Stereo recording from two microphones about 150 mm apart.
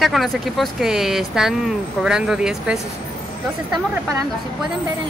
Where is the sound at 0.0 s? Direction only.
Centre (ahead or behind).